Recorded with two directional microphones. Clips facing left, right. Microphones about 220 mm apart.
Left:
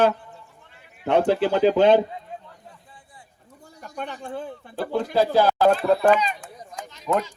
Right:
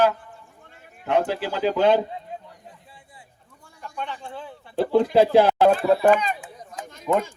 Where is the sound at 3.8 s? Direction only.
40° left (ahead or behind).